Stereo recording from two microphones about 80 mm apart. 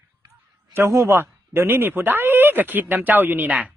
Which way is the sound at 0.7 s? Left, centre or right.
Right.